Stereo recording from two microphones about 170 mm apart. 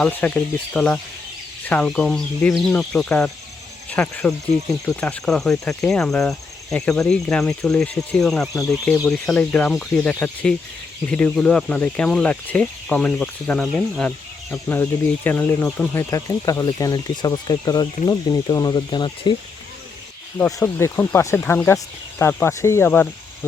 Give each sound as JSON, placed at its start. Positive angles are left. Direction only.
{"t": 0.0, "sound": "speech", "side_deg": 10}
{"t": 20.4, "sound": "speech", "side_deg": 15}